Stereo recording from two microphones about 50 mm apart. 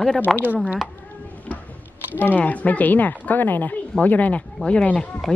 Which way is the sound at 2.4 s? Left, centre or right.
Left.